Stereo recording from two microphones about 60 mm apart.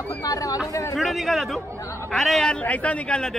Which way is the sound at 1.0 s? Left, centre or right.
Centre.